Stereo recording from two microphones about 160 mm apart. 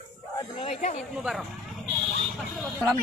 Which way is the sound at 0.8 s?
45° left (ahead or behind).